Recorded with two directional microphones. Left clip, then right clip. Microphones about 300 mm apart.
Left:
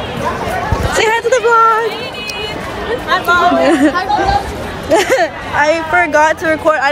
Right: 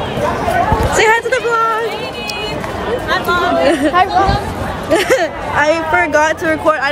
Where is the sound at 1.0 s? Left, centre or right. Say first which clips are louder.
Left 2 dB; centre.